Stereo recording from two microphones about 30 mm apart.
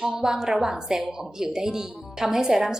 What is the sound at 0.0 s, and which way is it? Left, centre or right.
A woman's voice, centre.